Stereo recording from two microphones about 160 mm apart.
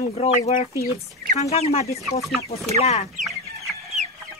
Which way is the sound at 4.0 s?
45° right (ahead or behind).